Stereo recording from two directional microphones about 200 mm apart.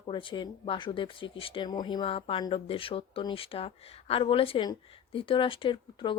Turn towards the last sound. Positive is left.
turn(degrees=25)  # may be behind; listen again after turning